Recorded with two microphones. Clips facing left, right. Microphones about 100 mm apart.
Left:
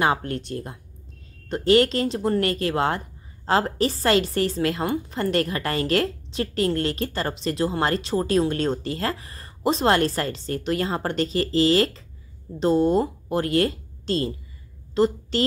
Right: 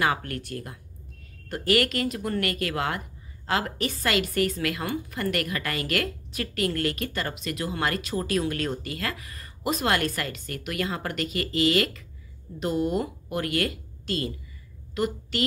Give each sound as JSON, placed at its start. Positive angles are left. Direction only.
{"t": 0.0, "sound": "a woman's voice", "side_deg": 25}